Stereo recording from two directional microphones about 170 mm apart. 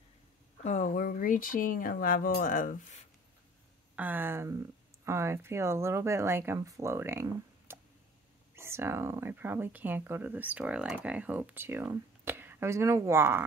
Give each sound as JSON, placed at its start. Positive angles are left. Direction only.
{"t": 0.7, "sound": "speech", "side_deg": 45}
{"t": 3.9, "sound": "speech", "side_deg": -10}